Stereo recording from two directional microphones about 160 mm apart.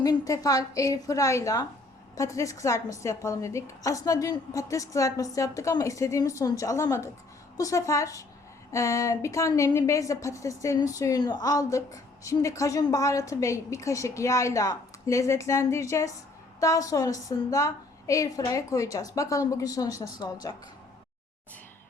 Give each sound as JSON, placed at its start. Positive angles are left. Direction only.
{"t": 0.0, "sound": "a woman's voice", "side_deg": 25}